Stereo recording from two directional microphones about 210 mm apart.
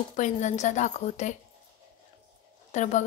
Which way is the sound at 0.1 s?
35° left (ahead or behind).